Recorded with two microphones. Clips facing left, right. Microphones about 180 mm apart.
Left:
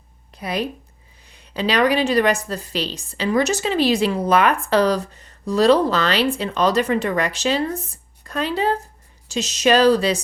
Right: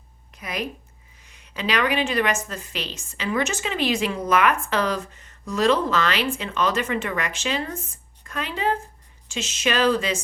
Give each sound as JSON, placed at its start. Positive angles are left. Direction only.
{"t": 0.3, "sound": "a woman's voice", "side_deg": 30}